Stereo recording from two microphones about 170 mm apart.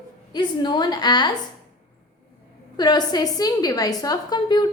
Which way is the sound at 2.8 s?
25° left (ahead or behind).